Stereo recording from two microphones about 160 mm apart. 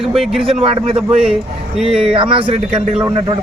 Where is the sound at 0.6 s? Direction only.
35° right (ahead or behind).